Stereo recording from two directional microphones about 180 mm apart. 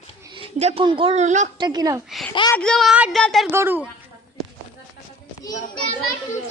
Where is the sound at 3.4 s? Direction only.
10° right (ahead or behind).